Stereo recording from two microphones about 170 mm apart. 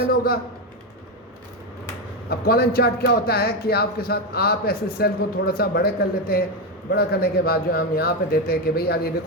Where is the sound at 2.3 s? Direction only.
65° left (ahead or behind).